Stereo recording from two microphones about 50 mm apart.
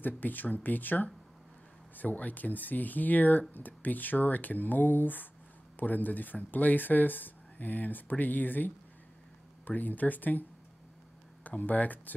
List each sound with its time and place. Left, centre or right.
0.0 s speech: left
11.4 s speech: left